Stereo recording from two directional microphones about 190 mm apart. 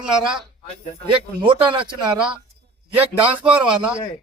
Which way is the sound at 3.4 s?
5° right (ahead or behind).